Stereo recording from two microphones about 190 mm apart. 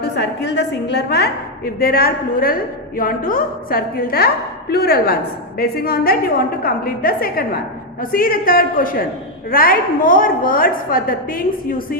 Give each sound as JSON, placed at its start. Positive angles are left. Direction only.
{"t": 0.0, "sound": "a woman's voice", "side_deg": 65}